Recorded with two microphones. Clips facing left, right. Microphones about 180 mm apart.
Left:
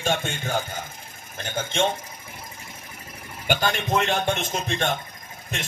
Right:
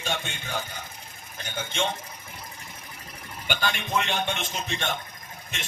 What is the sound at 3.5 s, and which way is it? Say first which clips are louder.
Speech: left 5 dB; 45° left (ahead or behind).